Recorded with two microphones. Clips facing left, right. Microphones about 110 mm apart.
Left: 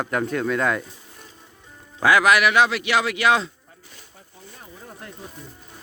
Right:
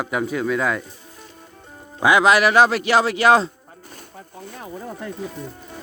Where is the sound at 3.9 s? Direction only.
60° right (ahead or behind); by 5.5 s 90° right.